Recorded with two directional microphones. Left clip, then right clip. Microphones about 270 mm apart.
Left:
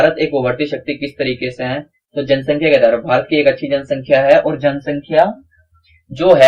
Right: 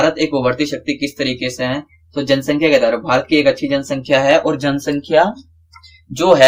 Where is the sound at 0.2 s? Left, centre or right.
Right.